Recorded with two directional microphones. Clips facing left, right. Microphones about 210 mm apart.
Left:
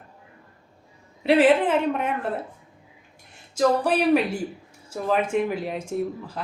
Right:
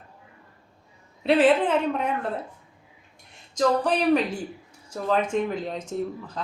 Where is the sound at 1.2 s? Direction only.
10° left (ahead or behind).